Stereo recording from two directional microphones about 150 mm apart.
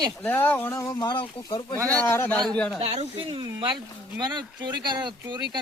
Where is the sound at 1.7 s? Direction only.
25° right (ahead or behind).